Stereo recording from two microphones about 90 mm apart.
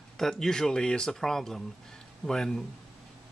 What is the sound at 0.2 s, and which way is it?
Speech, 5° left (ahead or behind).